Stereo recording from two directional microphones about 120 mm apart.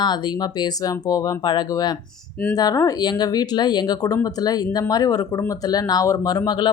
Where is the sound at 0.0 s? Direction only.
35° left (ahead or behind).